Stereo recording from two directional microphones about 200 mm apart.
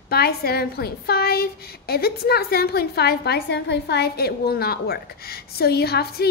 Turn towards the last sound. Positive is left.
turn(degrees=50)  # may be behind; listen again after turning